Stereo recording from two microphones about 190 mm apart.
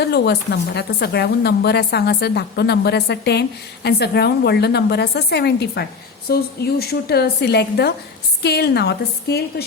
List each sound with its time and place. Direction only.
0.0 s a woman's voice: 60° left (ahead or behind)